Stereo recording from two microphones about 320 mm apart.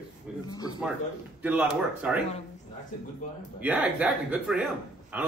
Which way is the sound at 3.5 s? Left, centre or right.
Centre.